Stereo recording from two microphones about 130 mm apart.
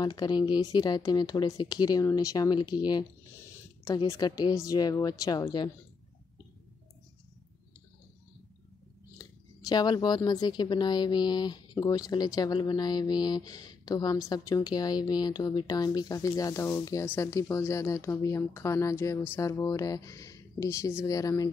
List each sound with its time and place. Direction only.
0.0 s speech: 35° left (ahead or behind)
9.2 s speech: 30° left (ahead or behind)